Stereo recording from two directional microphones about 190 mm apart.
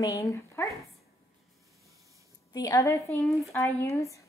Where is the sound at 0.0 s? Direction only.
15° left (ahead or behind).